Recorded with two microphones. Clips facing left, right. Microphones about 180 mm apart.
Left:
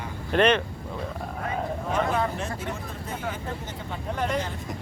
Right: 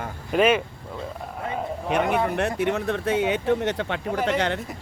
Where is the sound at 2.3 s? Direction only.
70° right (ahead or behind).